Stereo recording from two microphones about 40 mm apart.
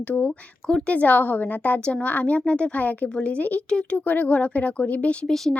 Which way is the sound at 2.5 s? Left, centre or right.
Left.